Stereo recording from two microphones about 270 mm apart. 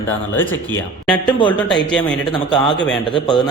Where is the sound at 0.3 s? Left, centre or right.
Centre.